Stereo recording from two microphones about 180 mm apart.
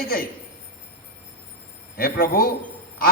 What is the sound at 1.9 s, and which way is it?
Speech, 55° left (ahead or behind).